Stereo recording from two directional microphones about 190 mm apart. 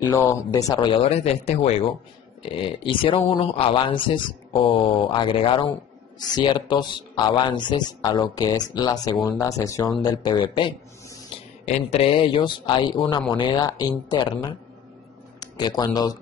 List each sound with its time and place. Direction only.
0.1 s speech: 15° left (ahead or behind)
10.5 s a sound: 25° left (ahead or behind)
11.6 s speech: 35° left (ahead or behind)